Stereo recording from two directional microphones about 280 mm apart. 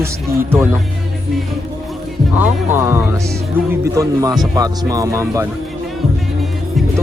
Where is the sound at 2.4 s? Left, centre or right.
Centre.